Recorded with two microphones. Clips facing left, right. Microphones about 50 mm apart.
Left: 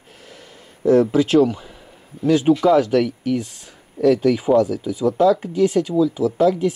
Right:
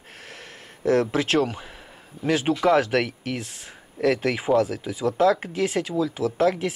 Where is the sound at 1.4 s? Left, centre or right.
Right.